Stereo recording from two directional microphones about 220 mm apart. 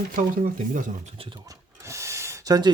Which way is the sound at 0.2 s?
35° right (ahead or behind).